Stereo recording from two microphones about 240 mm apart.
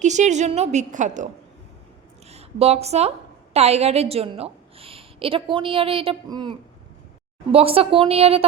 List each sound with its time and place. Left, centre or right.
0.0 s a woman's voice: right
2.3 s a woman's voice: right